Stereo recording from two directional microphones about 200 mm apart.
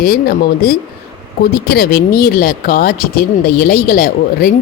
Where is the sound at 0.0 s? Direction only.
50° left (ahead or behind).